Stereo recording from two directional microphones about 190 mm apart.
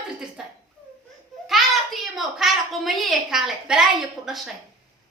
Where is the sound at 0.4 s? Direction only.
Centre (ahead or behind).